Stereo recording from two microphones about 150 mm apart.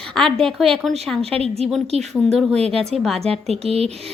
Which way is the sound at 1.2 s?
40° right (ahead or behind).